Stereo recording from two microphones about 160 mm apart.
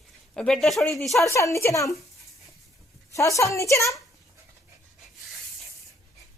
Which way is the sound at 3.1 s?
20° left (ahead or behind).